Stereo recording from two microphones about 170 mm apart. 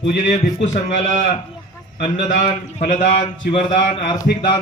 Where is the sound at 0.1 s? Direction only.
45° left (ahead or behind); by 4.6 s 30° left (ahead or behind).